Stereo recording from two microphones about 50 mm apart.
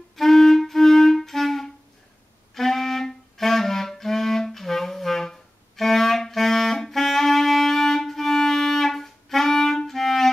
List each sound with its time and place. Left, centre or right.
0.1 s music: centre
2.5 s clarinet: centre